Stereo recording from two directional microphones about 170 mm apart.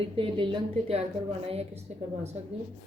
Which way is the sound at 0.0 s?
30° right (ahead or behind).